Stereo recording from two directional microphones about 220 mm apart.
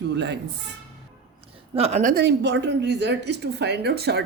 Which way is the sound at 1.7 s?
30° right (ahead or behind).